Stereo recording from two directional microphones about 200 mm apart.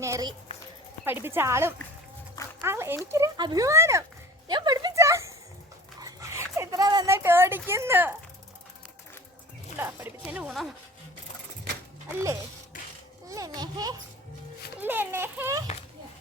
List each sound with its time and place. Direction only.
0.0 s speech: 15° right (ahead or behind)
4.4 s a sound: 20° right (ahead or behind)
9.7 s speech: 10° right (ahead or behind)
13.2 s speech: 15° right (ahead or behind)